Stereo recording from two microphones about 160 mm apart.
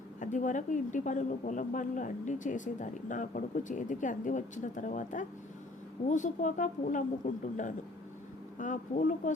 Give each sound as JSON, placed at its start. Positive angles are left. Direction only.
{"t": 0.2, "sound": "speech", "side_deg": 50}
{"t": 8.5, "sound": "speech", "side_deg": 55}